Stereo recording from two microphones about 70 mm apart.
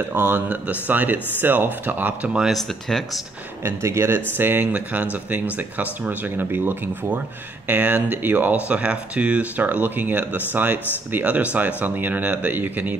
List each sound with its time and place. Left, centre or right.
0.1 s speech: right
2.2 s speech: centre
2.5 s speech: centre
3.6 s speech: right
4.4 s speech: right